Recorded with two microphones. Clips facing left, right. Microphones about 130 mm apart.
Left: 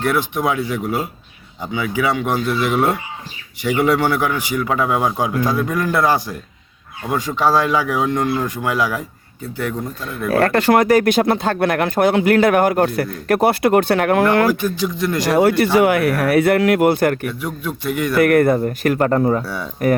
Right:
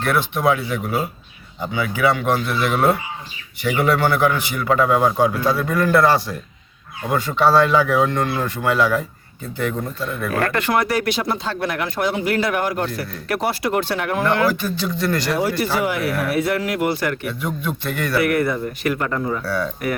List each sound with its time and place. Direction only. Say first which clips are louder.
0.0 s a man's voice: even; 15° left (ahead or behind)
10.3 s speech: left 7 dB; 35° left (ahead or behind); by 14.4 s 55° left (ahead or behind)
14.6 s a man's voice: left 3 dB; 15° left (ahead or behind)
15.3 s speech: left 6 dB; 60° left (ahead or behind)
17.4 s a man's voice: left 1 dB; 5° left (ahead or behind)
18.2 s speech: left 7 dB; 50° left (ahead or behind)
19.4 s speech: right 2 dB; 20° left (ahead or behind)